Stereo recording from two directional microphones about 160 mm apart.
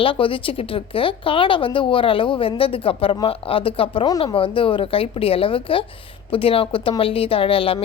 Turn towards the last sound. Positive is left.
turn(degrees=35)  # may be behind; listen again after turning